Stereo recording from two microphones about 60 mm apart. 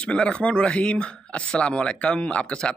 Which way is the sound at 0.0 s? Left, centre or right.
Centre.